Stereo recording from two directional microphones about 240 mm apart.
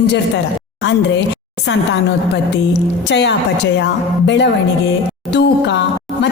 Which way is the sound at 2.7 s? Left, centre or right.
Left.